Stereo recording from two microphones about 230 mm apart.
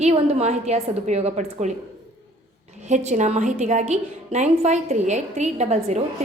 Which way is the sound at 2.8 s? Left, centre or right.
Right.